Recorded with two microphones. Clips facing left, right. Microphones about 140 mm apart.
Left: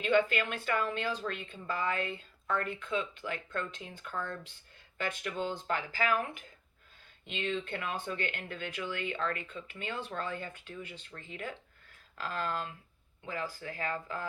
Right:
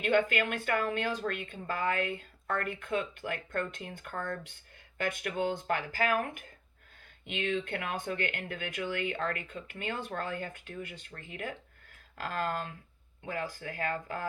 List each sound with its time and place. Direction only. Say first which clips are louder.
0.0 s speech: right 1 dB; 50° right (ahead or behind)